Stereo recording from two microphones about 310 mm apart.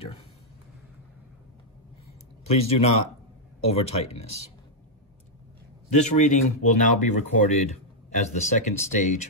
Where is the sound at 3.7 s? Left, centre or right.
Centre.